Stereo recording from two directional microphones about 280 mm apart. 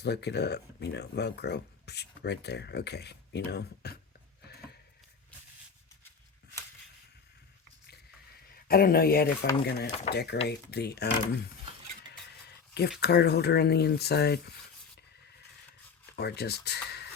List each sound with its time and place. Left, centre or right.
0.0 s speech: left
8.6 s speech: left
13.0 s speech: left
16.1 s speech: left